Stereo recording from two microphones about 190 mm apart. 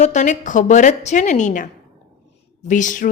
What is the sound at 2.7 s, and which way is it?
Speech, 40° left (ahead or behind).